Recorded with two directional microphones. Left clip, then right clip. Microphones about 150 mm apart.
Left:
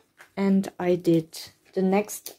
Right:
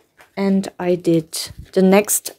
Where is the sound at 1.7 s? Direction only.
50° right (ahead or behind).